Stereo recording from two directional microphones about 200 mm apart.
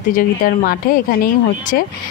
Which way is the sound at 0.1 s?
45° left (ahead or behind).